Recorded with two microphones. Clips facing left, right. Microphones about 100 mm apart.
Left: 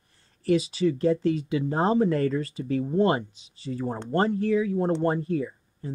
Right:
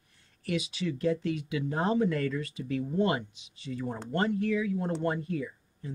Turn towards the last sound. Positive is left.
turn(degrees=35)  # may be behind; listen again after turning